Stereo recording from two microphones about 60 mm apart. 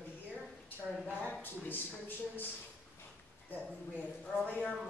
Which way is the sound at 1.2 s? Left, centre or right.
Left.